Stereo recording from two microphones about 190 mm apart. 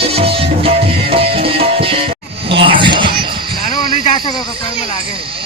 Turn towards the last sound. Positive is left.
turn(degrees=25)  # may be behind; listen again after turning